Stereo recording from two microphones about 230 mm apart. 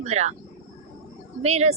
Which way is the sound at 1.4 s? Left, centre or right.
Right.